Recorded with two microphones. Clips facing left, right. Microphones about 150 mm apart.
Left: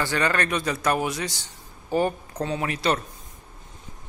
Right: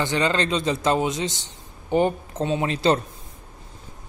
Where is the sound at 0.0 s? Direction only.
20° right (ahead or behind).